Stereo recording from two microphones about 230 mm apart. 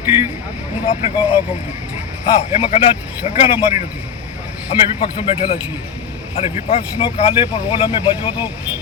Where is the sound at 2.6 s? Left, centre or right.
Left.